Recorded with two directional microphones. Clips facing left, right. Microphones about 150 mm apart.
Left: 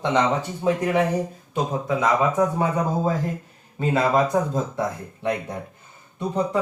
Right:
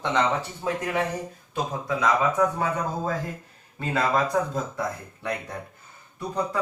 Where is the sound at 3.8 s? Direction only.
20° left (ahead or behind).